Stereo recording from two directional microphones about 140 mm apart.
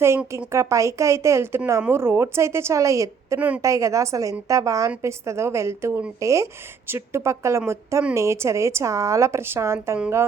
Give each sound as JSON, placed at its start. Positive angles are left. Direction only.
{"t": 0.5, "sound": "a woman's voice", "side_deg": -20}